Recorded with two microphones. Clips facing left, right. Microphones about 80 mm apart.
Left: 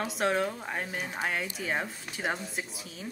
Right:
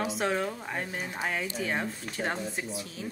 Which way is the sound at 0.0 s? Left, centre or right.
Centre.